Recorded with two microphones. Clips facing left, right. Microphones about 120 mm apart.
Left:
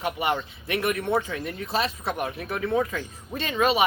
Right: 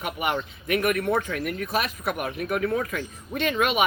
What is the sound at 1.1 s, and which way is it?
A man's voice, 30° left (ahead or behind).